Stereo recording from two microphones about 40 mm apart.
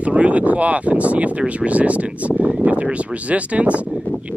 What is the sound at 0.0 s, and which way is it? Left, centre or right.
Speech, right.